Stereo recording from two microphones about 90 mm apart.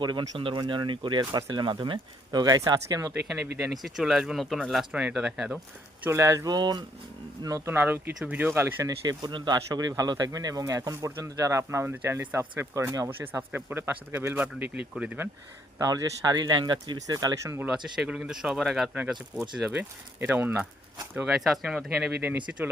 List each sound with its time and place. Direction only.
0.0 s speech: 55° right (ahead or behind)
0.3 s speech: 65° right (ahead or behind); by 3.1 s 40° right (ahead or behind)
3.6 s speech: centre (ahead or behind)
6.1 s speech: 30° right (ahead or behind); by 6.8 s 50° right (ahead or behind)
7.4 s speech: 35° right (ahead or behind)
9.0 s speech: 55° right (ahead or behind); by 14.3 s 25° right (ahead or behind)
14.3 s speech: 15° right (ahead or behind)
15.8 s speech: 40° right (ahead or behind)
17.9 s speech: 5° right (ahead or behind)
20.1 s speech: 20° right (ahead or behind)
21.2 s speech: 5° right (ahead or behind)
22.2 s speech: 20° right (ahead or behind)